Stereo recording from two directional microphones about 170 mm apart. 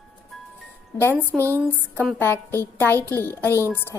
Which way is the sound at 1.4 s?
15° right (ahead or behind).